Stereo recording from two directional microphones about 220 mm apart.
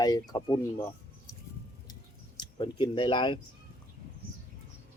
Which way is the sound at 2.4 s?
20° left (ahead or behind).